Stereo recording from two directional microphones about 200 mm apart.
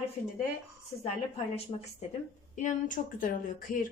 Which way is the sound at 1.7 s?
25° left (ahead or behind).